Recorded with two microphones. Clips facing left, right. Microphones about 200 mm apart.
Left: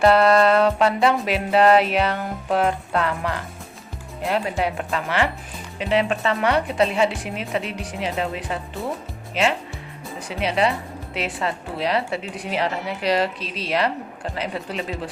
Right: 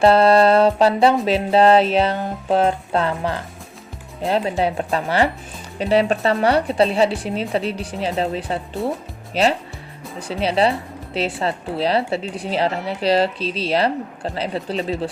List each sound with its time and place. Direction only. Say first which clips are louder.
0.0 s speech: right 2 dB; 30° right (ahead or behind)
1.2 s music: right 3 dB; 30° right (ahead or behind)
4.2 s speech: right 3 dB; 30° right (ahead or behind)
8.8 s speech: right 6 dB; centre (ahead or behind)
9.3 s speech: right 3 dB; 35° right (ahead or behind)